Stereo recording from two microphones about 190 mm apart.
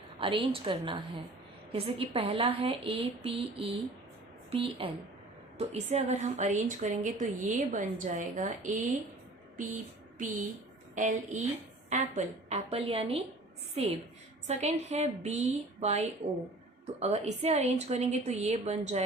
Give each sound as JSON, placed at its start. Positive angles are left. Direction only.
{"t": 0.2, "sound": "a woman's voice", "side_deg": -25}